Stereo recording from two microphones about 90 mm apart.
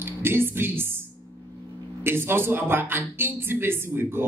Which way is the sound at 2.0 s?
25° right (ahead or behind).